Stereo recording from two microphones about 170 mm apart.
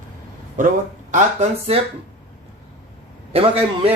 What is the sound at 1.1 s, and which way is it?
Speech, 45° right (ahead or behind).